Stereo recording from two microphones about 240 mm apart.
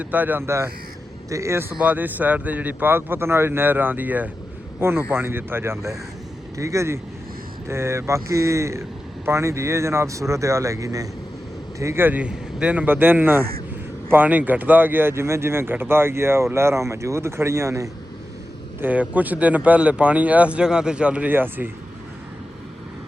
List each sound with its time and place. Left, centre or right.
0.0 s speech: centre